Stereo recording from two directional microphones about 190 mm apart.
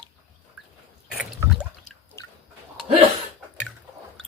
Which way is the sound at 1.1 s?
Centre (ahead or behind).